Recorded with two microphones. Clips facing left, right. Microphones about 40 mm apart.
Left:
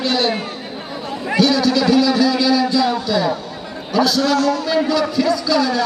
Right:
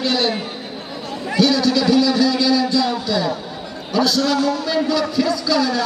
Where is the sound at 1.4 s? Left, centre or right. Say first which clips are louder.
Left 1 dB; centre.